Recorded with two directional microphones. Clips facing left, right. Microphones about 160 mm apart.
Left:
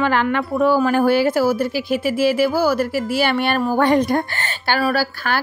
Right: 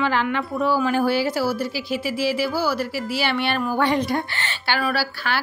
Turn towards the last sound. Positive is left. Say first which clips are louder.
# left 4 dB
turn(degrees=45)  # may be behind; listen again after turning